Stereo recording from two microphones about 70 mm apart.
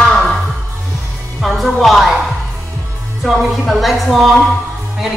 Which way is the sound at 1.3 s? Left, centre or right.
Centre.